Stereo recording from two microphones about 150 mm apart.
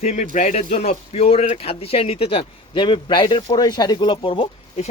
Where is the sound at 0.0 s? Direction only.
50° left (ahead or behind).